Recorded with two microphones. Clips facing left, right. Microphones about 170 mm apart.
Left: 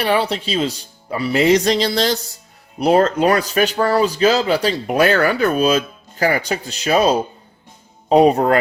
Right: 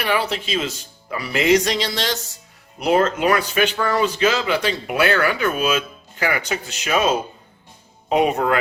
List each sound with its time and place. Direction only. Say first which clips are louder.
0.0 s speech: left 4 dB; 30° left (ahead or behind)